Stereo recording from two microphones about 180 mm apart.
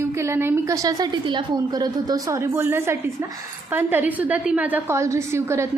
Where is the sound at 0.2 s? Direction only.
15° right (ahead or behind).